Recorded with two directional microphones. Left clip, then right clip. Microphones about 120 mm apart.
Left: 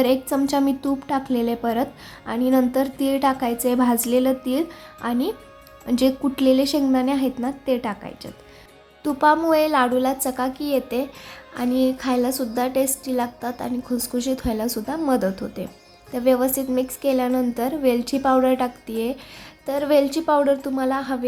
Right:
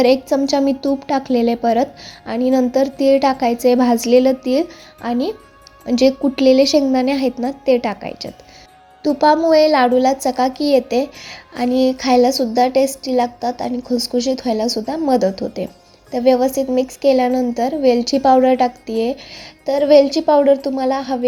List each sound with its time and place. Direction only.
0.0 s a woman's voice: 25° right (ahead or behind)
9.0 s a woman's voice: 20° right (ahead or behind)
17.5 s speech: 10° right (ahead or behind)
18.2 s a woman's voice: 25° right (ahead or behind)